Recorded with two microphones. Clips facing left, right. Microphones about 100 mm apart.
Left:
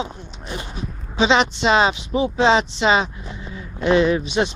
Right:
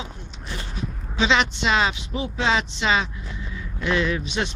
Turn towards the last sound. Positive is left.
turn(degrees=20)  # may be behind; listen again after turning